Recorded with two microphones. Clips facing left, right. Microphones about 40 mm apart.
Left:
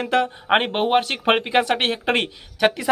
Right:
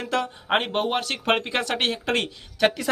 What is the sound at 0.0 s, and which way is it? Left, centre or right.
Speech, left.